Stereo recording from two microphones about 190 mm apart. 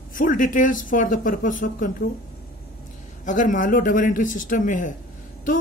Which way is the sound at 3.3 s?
45° left (ahead or behind).